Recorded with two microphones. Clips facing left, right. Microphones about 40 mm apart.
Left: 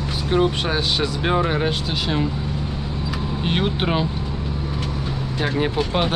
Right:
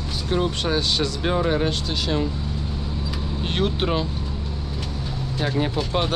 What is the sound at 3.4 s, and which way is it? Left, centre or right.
Speech, centre.